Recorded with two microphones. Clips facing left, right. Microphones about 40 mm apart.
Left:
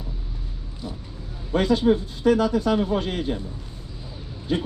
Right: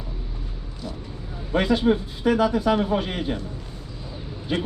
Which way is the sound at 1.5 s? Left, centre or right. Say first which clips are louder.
Left 1 dB; centre.